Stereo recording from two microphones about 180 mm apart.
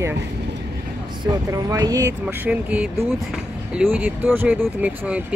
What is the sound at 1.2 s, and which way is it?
Speech, 20° right (ahead or behind).